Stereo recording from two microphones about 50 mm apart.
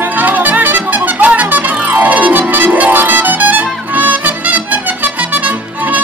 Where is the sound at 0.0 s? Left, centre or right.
Right.